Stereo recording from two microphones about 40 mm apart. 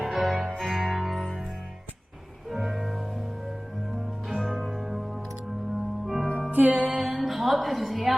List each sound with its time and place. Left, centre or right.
0.0 s music: centre
2.5 s music: centre
4.4 s music: centre
6.5 s music: right
6.9 s music: centre